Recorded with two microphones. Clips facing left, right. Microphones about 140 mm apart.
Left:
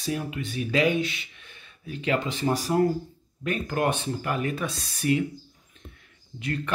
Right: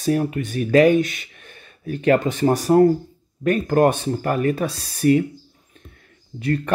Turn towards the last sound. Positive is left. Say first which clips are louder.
# right 8 dB
turn(degrees=-40)  # may be behind; listen again after turning